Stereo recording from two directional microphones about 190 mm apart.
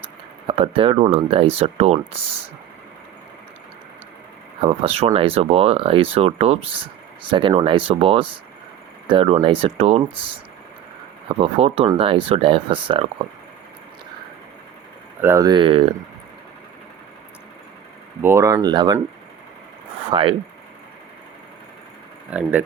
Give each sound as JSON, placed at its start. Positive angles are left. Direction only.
{"t": 0.4, "sound": "speech", "side_deg": -30}
{"t": 4.6, "sound": "speech", "side_deg": -30}
{"t": 15.2, "sound": "speech", "side_deg": -15}
{"t": 18.2, "sound": "speech", "side_deg": -15}
{"t": 20.1, "sound": "speech", "side_deg": -25}
{"t": 22.3, "sound": "speech", "side_deg": -5}